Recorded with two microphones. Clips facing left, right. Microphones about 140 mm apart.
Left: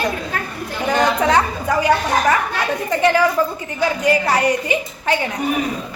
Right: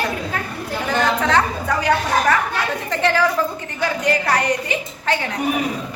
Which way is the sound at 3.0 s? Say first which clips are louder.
Left 2 dB; 15° left (ahead or behind).